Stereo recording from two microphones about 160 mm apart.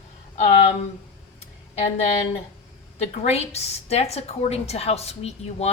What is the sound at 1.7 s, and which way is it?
A woman's voice, 40° left (ahead or behind).